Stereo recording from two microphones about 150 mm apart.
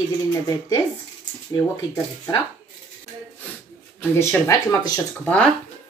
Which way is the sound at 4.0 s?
20° left (ahead or behind).